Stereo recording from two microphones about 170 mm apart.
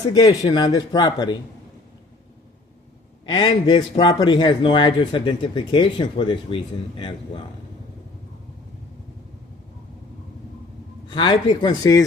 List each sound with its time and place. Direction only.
0.1 s a man's voice: 25° left (ahead or behind)
3.2 s a man's voice: 25° left (ahead or behind)
11.1 s a man's voice: 30° left (ahead or behind)